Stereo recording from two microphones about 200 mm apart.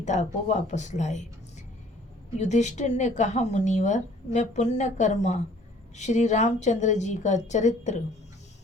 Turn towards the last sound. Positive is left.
turn(degrees=35)  # may be behind; listen again after turning